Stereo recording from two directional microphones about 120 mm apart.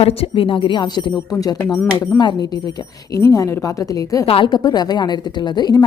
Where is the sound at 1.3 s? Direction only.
30° left (ahead or behind).